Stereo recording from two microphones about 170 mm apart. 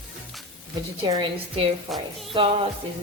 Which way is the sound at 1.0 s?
25° right (ahead or behind).